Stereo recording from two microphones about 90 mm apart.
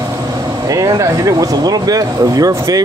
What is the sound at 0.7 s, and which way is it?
Speech, 40° right (ahead or behind).